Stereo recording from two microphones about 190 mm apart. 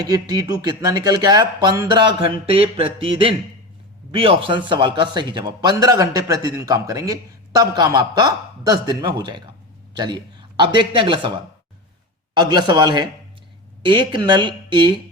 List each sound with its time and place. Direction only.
0.0 s a man's voice: 20° right (ahead or behind)
12.3 s a man's voice: 25° right (ahead or behind)